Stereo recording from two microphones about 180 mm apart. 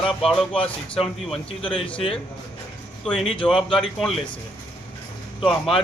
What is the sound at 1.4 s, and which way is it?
Speech, 30° left (ahead or behind).